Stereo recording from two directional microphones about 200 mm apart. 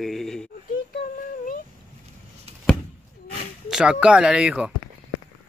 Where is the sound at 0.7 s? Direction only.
45° left (ahead or behind).